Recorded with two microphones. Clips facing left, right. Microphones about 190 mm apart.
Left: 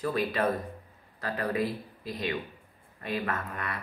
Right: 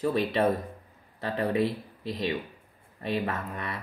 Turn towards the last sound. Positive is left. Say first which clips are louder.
# right 1 dB
turn(degrees=-20)  # may be behind; listen again after turning